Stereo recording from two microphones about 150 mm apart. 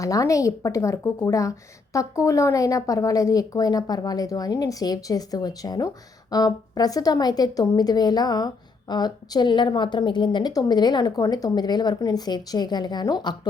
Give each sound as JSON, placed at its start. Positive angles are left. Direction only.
{"t": 0.0, "sound": "a woman's voice", "side_deg": 20}